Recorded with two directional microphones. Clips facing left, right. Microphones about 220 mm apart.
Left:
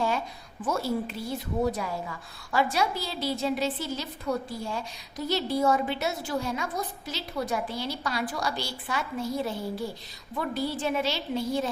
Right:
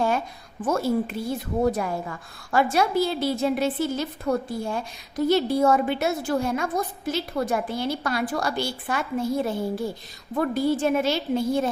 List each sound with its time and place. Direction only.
0.6 s a woman's voice: 50° right (ahead or behind)